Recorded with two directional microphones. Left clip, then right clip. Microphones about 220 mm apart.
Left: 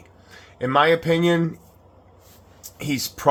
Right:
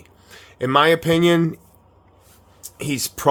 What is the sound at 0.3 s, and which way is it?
Speech, 40° right (ahead or behind).